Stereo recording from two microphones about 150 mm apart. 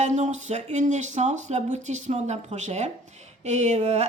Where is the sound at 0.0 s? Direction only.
50° right (ahead or behind).